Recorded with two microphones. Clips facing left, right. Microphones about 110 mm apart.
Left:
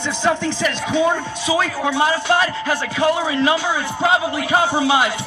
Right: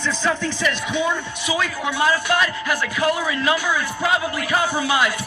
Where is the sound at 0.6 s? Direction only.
35° left (ahead or behind).